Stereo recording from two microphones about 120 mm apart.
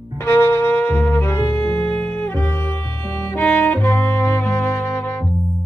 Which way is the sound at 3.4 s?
15° left (ahead or behind).